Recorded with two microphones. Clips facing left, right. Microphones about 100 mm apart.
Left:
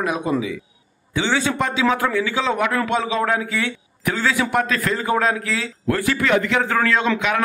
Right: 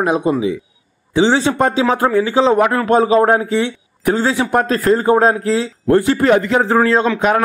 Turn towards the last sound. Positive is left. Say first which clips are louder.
# right 6 dB
turn(degrees=-40)  # may be behind; listen again after turning